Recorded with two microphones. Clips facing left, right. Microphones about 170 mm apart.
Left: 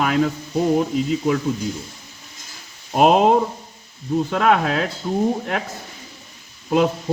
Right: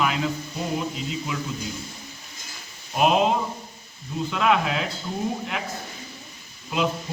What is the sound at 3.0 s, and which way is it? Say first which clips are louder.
Speech: left 6 dB; 50° left (ahead or behind).